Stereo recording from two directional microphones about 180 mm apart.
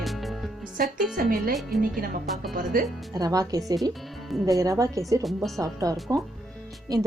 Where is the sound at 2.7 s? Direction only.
50° right (ahead or behind).